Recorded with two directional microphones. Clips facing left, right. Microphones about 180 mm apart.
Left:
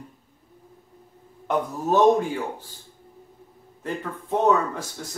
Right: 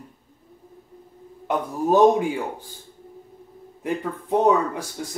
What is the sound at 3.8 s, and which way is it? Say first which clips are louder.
Speech: right 4 dB; 15° right (ahead or behind).